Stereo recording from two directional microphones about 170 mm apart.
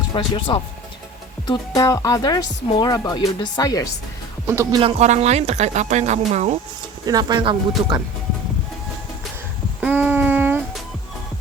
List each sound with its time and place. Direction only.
0.1 s speech: 30° left (ahead or behind)
4.4 s speech: 15° right (ahead or behind)
4.8 s speech: 35° right (ahead or behind)
7.0 s speech: 25° right (ahead or behind)
9.8 s a sound: 10° right (ahead or behind)